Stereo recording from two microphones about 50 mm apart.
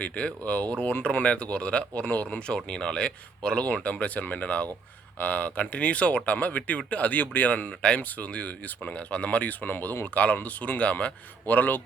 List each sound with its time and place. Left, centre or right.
0.0 s speech: left
7.8 s speech: left